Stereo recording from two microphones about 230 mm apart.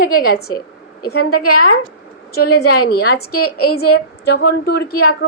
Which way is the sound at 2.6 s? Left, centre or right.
Left.